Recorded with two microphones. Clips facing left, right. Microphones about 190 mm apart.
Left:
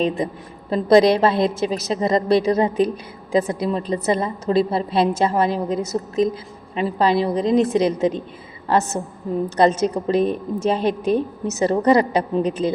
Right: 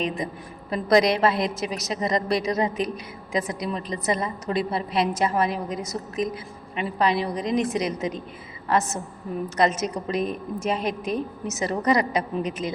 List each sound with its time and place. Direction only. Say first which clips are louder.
0.7 s a woman's voice: left 6 dB; 30° left (ahead or behind)
9.6 s a woman's voice: left 6 dB; 30° left (ahead or behind)